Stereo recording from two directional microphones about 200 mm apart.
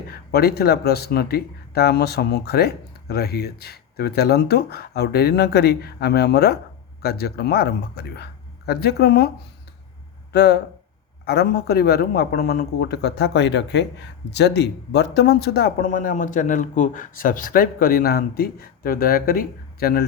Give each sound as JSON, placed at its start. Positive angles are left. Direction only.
{"t": 0.1, "sound": "speech", "side_deg": 50}
{"t": 10.3, "sound": "speech", "side_deg": 55}